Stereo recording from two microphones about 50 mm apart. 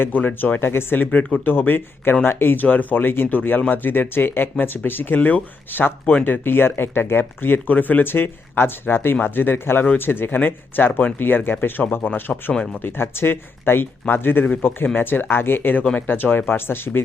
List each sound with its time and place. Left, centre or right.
0.0 s speech: left
12.8 s speech: left